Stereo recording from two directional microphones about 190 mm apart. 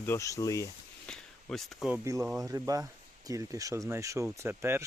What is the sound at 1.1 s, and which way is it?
Speech, centre (ahead or behind).